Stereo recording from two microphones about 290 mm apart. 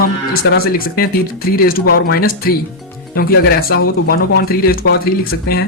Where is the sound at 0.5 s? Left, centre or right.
Left.